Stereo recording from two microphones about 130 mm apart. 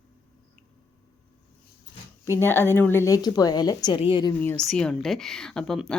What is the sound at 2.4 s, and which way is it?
Speech, 15° left (ahead or behind).